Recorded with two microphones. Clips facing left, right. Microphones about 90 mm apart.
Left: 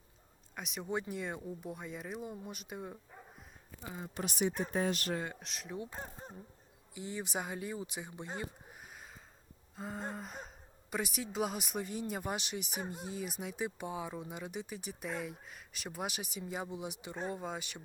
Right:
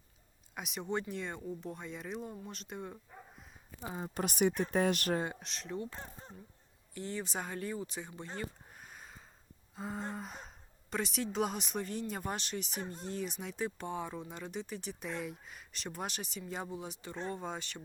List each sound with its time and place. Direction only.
0.5 s speech: centre (ahead or behind)
3.8 s speech: 35° right (ahead or behind)
4.2 s speech: 55° right (ahead or behind)
4.7 s speech: 70° right (ahead or behind)
5.4 s speech: 5° left (ahead or behind)
8.8 s a sound: centre (ahead or behind)
9.7 s gasp: centre (ahead or behind)
10.9 s speech: 5° left (ahead or behind)